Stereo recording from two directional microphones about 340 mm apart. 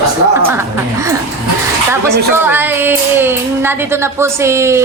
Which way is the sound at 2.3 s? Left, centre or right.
Centre.